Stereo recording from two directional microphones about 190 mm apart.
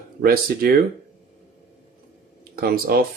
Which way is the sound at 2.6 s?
50° right (ahead or behind).